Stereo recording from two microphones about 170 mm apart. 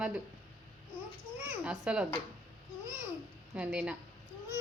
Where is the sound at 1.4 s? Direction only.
10° right (ahead or behind).